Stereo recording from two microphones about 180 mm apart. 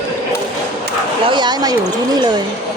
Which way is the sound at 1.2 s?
25° right (ahead or behind).